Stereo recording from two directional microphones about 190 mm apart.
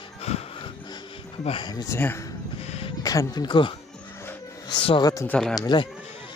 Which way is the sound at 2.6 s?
30° left (ahead or behind).